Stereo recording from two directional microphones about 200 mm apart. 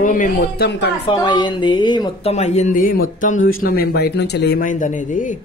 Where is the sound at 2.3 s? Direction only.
35° left (ahead or behind); by 4.6 s 55° left (ahead or behind).